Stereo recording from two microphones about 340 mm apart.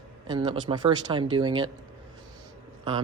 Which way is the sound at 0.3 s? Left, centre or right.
Centre.